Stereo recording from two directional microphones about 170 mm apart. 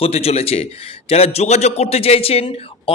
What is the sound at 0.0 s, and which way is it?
A man's voice, 35° left (ahead or behind).